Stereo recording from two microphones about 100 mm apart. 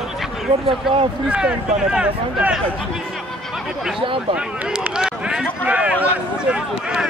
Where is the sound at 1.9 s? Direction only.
10° right (ahead or behind).